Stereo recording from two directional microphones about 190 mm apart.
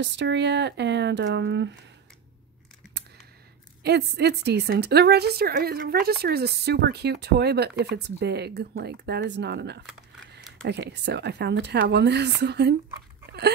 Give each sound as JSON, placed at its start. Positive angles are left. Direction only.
{"t": 0.0, "sound": "a woman's voice", "side_deg": -65}
{"t": 3.8, "sound": "a woman's voice", "side_deg": -60}